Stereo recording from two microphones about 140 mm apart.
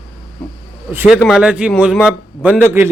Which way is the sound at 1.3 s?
5° right (ahead or behind).